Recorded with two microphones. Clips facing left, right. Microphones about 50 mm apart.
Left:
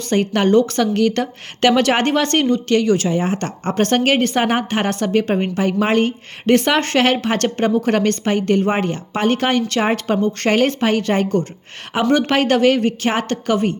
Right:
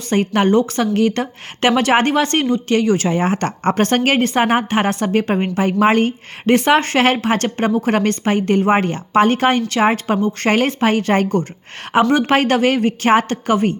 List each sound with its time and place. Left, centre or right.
0.1 s a woman's voice: centre
3.1 s speech: right
3.8 s a woman's voice: right